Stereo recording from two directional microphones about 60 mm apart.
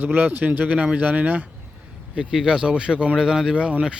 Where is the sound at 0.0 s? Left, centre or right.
Right.